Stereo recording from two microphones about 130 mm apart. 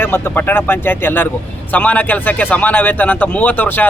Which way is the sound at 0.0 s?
20° left (ahead or behind).